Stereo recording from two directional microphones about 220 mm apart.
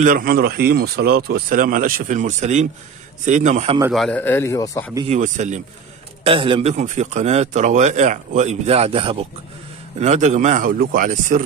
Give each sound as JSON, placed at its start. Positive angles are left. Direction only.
{"t": 0.0, "sound": "a man's voice", "side_deg": -40}
{"t": 3.9, "sound": "a man's voice", "side_deg": 5}
{"t": 5.0, "sound": "a man's voice", "side_deg": -35}
{"t": 6.2, "sound": "a man's voice", "side_deg": -25}